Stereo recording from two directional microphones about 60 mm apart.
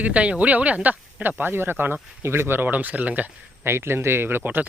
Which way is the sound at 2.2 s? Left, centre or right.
Right.